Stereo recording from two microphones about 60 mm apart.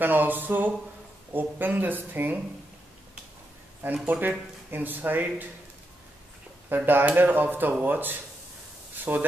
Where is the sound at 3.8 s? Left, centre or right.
Right.